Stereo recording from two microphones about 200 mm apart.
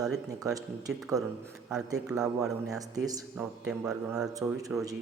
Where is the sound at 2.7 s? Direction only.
15° right (ahead or behind).